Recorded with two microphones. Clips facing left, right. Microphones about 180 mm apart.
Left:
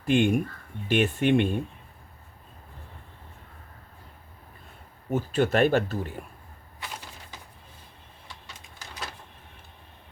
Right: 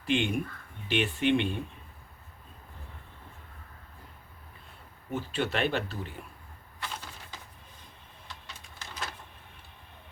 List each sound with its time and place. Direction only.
0.0 s speech: 45° left (ahead or behind)
5.1 s speech: 45° left (ahead or behind)